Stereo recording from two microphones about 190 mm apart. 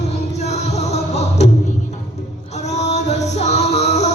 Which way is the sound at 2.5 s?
35° left (ahead or behind).